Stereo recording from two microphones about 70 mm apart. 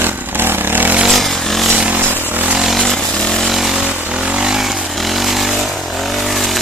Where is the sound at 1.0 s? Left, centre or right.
Centre.